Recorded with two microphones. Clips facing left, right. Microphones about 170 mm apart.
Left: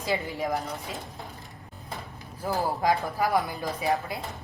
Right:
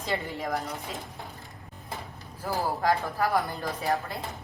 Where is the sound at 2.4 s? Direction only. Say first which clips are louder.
Left 1 dB; 15° left (ahead or behind).